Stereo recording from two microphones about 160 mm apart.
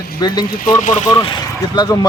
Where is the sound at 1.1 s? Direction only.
30° left (ahead or behind).